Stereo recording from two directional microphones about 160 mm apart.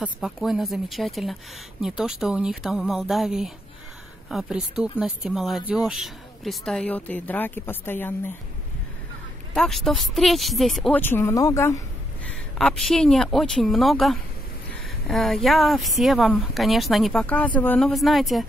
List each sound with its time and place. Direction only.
0.0 s speech: 5° right (ahead or behind); by 8.3 s 15° left (ahead or behind)
9.5 s speech: 5° left (ahead or behind)
11.0 s speech: 15° left (ahead or behind)
12.3 s speech: 5° left (ahead or behind)